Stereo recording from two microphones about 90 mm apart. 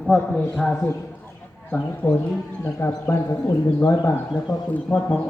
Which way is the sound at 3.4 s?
40° left (ahead or behind).